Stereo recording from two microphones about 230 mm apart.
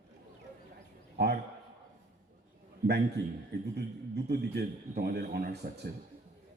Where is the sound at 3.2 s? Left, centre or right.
Right.